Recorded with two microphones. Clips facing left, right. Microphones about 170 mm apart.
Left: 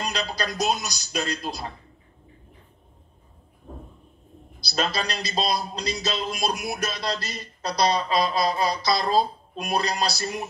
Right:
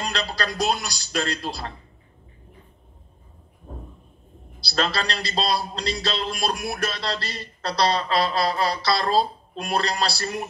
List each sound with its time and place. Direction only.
0.0 s a man's voice: 15° left (ahead or behind)
4.6 s a man's voice: 15° left (ahead or behind)